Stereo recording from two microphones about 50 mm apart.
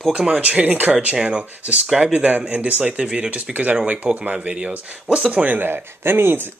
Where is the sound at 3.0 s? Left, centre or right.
Centre.